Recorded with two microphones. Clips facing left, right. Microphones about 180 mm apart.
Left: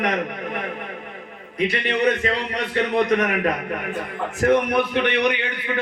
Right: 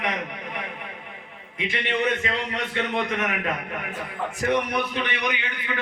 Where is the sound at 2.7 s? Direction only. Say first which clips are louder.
Left 8 dB; 40° left (ahead or behind).